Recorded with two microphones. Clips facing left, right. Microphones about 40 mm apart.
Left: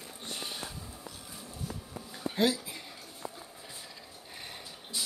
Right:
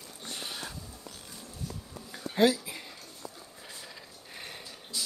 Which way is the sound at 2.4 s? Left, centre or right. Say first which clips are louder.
Right 4 dB; right.